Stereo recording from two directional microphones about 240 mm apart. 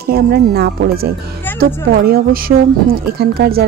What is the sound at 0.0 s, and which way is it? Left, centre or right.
A woman's voice, right.